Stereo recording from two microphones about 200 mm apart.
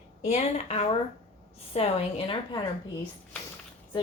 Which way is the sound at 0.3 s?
35° left (ahead or behind).